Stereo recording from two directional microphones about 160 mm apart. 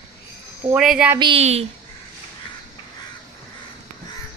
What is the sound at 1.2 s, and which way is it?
Speech, 40° right (ahead or behind).